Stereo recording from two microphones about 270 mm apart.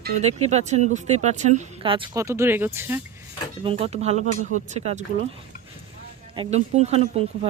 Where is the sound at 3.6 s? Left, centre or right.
Right.